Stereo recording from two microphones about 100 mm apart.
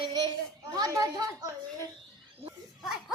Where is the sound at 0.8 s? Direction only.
35° right (ahead or behind).